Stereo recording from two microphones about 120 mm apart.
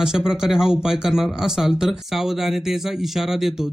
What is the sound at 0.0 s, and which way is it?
Speech, 5° right (ahead or behind).